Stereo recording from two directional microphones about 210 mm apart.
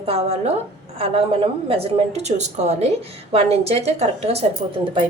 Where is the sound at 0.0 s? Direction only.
30° right (ahead or behind).